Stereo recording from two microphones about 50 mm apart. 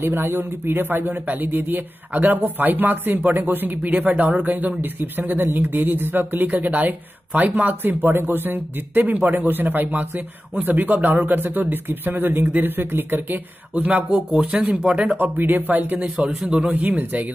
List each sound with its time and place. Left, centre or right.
0.0 s speech: right
13.9 s speech: centre
14.3 s speech: right
15.1 s speech: right